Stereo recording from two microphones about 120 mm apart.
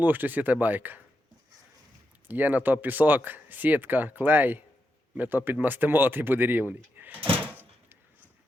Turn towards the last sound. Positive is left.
turn(degrees=-15)  # may be behind; listen again after turning